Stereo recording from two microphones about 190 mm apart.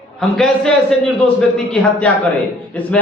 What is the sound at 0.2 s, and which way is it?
A man's voice, 5° left (ahead or behind).